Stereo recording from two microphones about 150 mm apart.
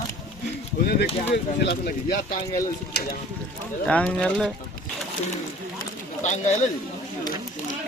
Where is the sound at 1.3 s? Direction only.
90° left.